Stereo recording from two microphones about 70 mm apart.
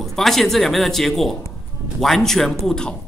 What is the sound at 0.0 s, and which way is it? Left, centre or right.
A man's voice, centre.